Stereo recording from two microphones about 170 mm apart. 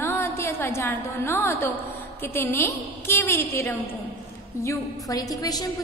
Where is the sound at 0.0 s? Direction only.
15° left (ahead or behind).